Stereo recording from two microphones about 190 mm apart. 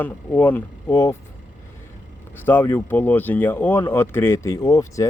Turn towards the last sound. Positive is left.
turn(degrees=15)  # may be behind; listen again after turning